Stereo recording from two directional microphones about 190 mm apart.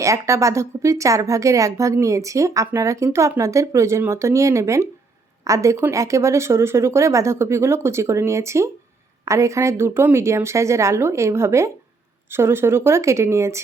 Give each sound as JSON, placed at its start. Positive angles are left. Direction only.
{"t": 0.0, "sound": "a woman's voice", "side_deg": -15}